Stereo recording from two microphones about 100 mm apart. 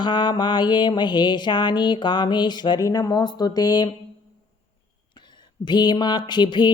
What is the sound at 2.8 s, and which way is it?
Speech, 35° left (ahead or behind).